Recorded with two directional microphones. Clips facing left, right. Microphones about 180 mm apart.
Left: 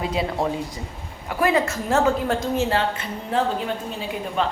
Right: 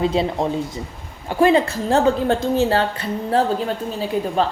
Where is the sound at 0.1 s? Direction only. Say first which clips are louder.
Right 4 dB; 25° right (ahead or behind).